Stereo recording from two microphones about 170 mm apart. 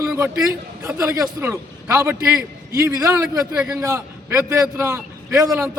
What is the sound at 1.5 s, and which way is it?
A man's voice, 15° right (ahead or behind).